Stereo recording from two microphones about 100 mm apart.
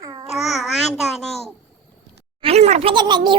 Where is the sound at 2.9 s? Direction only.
50° right (ahead or behind).